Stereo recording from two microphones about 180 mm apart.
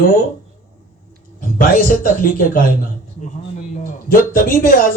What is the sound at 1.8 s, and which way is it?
Speech, 50° left (ahead or behind).